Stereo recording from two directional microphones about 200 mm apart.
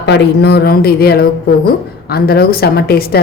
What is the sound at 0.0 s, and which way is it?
A woman's voice, 60° left (ahead or behind).